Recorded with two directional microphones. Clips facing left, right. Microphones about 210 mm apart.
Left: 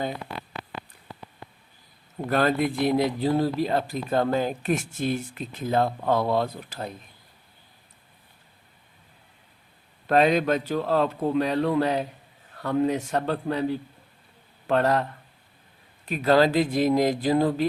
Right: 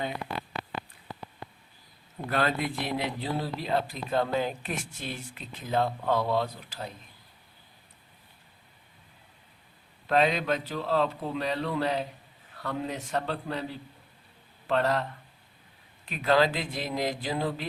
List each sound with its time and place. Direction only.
2.3 s speech: 45° left (ahead or behind)
10.1 s speech: 50° left (ahead or behind)
16.0 s speech: 40° left (ahead or behind)